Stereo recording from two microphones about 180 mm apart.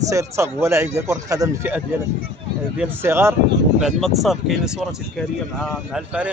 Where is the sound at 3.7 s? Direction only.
Centre (ahead or behind).